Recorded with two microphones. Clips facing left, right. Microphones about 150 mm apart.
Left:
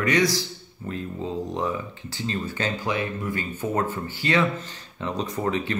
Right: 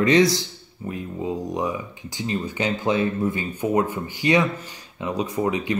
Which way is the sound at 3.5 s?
15° right (ahead or behind).